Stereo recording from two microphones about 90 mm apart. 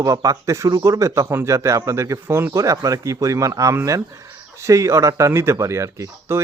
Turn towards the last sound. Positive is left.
turn(degrees=-30)  # may be behind; listen again after turning